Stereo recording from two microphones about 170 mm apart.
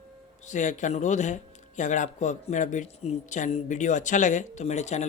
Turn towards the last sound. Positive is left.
turn(degrees=40)  # may be behind; listen again after turning